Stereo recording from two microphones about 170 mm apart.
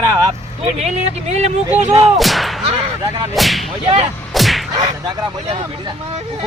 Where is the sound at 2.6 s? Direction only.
30° right (ahead or behind).